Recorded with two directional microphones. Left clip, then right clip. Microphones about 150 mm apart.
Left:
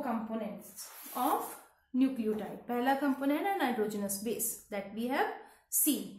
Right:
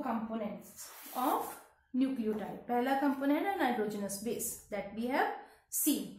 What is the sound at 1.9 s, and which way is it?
A woman's voice, 20° left (ahead or behind).